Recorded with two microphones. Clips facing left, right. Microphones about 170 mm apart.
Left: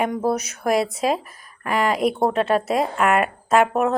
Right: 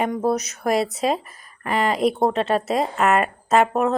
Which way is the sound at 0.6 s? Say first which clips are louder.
Left 1 dB; centre (ahead or behind).